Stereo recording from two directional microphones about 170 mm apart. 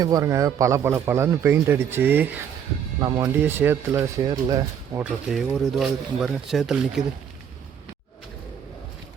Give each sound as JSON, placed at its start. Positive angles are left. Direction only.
{"t": 0.0, "sound": "a man's voice", "side_deg": -20}
{"t": 3.0, "sound": "speech", "side_deg": -20}
{"t": 3.2, "sound": "a man's voice", "side_deg": -10}
{"t": 5.3, "sound": "speech", "side_deg": 0}